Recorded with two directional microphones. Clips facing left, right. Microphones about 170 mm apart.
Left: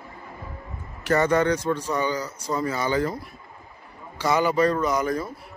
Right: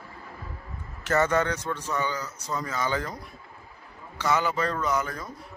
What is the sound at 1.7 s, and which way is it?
Speech, 25° left (ahead or behind).